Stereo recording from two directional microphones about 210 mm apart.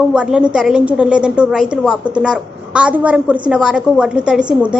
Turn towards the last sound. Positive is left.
turn(degrees=-5)  # may be behind; listen again after turning